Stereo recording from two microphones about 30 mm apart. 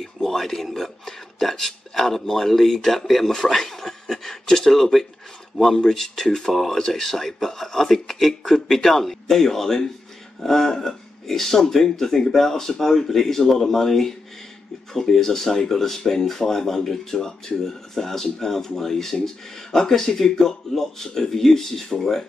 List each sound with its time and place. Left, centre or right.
0.0 s speech: centre